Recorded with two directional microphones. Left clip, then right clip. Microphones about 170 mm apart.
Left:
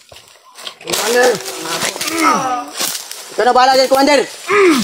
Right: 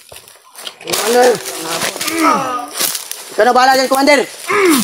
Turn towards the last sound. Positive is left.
turn(degrees=5)  # may be behind; listen again after turning